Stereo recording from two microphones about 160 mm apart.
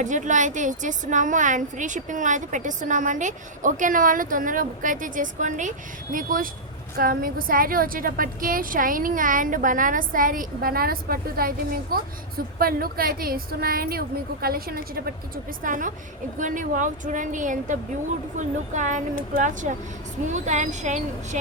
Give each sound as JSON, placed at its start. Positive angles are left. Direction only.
{"t": 0.0, "sound": "a woman's voice", "side_deg": -50}
{"t": 15.6, "sound": "a woman's voice", "side_deg": -55}